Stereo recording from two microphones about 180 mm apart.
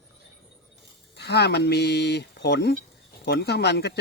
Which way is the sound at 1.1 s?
65° left (ahead or behind).